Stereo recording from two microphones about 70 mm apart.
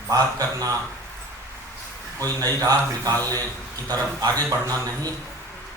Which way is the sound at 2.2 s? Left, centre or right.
Right.